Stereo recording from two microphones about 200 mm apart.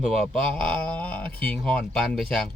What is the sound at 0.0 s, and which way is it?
Speech, centre (ahead or behind).